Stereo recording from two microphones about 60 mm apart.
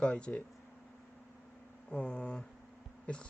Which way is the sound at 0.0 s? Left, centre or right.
Centre.